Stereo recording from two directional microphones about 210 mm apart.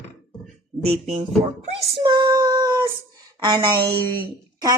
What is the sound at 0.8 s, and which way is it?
Speech, 30° right (ahead or behind).